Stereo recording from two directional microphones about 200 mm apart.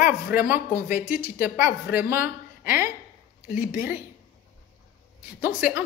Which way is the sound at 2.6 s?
45° left (ahead or behind).